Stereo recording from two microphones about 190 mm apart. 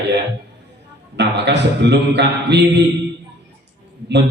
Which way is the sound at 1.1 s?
65° right (ahead or behind).